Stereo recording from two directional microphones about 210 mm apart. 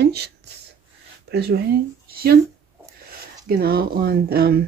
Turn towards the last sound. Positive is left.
turn(degrees=-45)  # may be behind; listen again after turning